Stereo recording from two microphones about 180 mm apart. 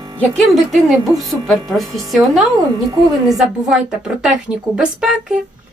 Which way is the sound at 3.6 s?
5° right (ahead or behind).